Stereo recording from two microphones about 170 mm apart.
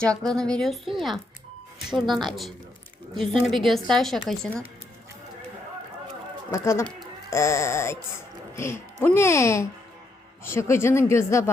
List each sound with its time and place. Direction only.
0.0 s speech: 5° left (ahead or behind)
6.5 s speech: 15° left (ahead or behind)